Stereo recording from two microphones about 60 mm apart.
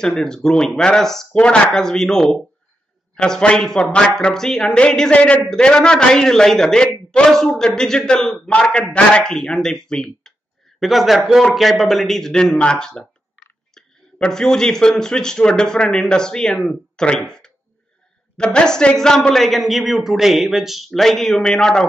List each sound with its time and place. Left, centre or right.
0.0 s a man's voice: centre
10.8 s a woman's voice: centre